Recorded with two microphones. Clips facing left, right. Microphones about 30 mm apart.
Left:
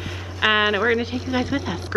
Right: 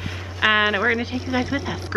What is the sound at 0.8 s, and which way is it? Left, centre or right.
Speech, centre.